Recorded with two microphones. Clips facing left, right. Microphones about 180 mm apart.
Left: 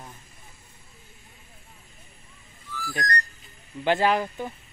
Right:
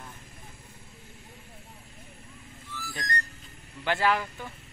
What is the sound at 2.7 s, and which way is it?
Whistling, 25° right (ahead or behind).